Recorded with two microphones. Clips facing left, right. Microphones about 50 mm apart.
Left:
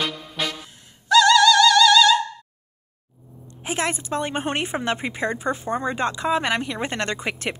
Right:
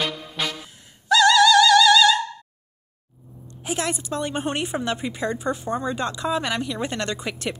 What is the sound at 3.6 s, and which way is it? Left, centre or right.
A woman's voice, left.